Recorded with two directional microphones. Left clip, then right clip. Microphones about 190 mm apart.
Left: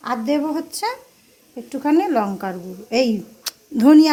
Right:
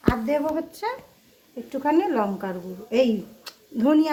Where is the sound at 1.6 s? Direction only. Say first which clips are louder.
Left 3 dB; 40° left (ahead or behind).